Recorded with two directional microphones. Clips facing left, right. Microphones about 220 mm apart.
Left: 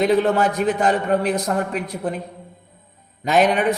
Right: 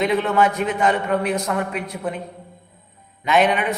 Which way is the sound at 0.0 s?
35° left (ahead or behind).